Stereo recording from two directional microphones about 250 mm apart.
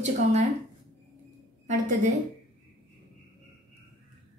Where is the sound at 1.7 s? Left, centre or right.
Right.